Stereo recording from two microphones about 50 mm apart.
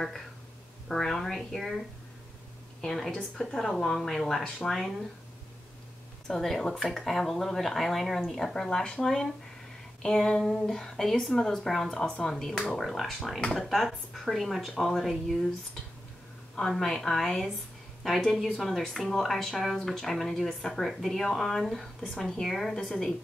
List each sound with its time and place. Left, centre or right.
0.8 s speech: centre
2.8 s speech: centre
6.2 s speech: centre
8.6 s speech: centre
12.2 s speech: centre
16.5 s speech: centre
22.1 s speech: centre
22.4 s speech: centre